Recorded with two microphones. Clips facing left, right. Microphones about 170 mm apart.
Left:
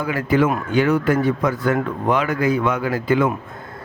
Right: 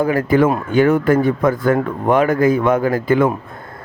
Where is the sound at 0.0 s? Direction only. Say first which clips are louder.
Right 4 dB; 45° right (ahead or behind).